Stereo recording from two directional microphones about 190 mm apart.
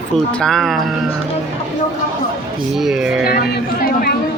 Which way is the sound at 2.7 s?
Centre (ahead or behind).